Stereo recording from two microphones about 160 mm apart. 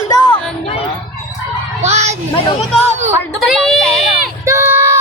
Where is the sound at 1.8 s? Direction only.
45° right (ahead or behind).